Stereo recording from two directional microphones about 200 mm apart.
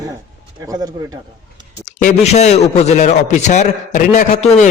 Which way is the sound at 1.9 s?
35° left (ahead or behind).